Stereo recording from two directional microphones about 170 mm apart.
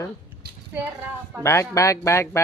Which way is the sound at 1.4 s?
15° left (ahead or behind).